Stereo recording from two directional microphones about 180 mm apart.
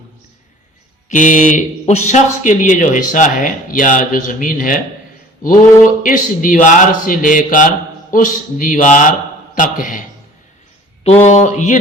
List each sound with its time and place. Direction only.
1.0 s speech: 45° left (ahead or behind)
11.2 s speech: 40° left (ahead or behind)